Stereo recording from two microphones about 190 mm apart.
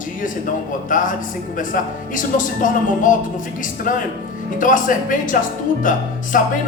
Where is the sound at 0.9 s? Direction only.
45° left (ahead or behind).